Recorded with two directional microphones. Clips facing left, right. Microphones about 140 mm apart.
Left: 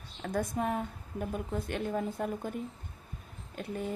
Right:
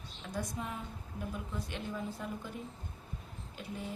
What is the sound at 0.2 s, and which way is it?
A woman's voice, 55° left (ahead or behind).